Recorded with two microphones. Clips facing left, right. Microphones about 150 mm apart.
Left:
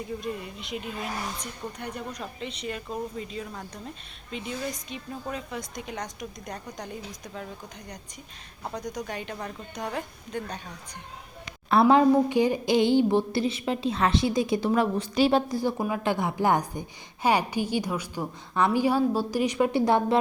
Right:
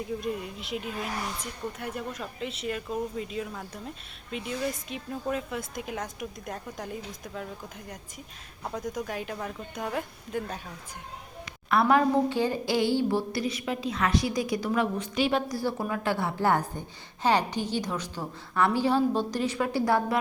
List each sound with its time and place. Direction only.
0.0 s speech: centre (ahead or behind)
8.6 s speech: 5° right (ahead or behind)
11.4 s a woman's voice: 25° left (ahead or behind)
15.5 s a woman's voice: 15° left (ahead or behind)